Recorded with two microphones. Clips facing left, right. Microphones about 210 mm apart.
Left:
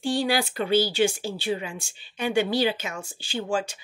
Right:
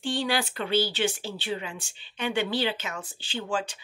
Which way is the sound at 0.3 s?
10° left (ahead or behind).